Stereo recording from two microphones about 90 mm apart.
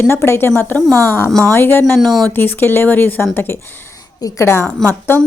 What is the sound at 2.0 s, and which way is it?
Speech, centre (ahead or behind).